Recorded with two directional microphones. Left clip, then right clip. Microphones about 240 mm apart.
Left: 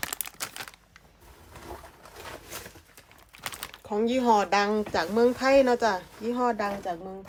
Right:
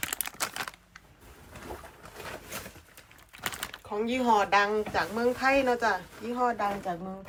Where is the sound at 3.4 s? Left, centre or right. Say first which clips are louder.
Right 2 dB; centre.